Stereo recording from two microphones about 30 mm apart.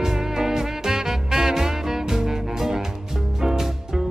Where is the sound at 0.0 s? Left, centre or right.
Centre.